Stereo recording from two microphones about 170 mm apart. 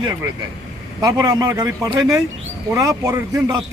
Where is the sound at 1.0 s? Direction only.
20° right (ahead or behind).